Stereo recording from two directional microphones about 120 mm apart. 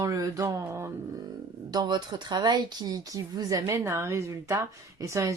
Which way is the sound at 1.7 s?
35° right (ahead or behind).